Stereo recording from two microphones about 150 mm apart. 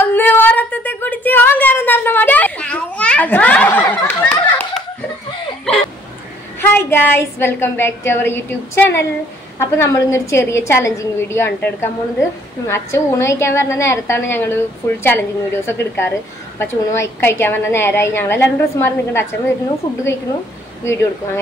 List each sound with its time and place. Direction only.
0.0 s a sound: 15° left (ahead or behind)
6.6 s a woman's voice: 15° left (ahead or behind)
20.8 s a woman's voice: 15° left (ahead or behind)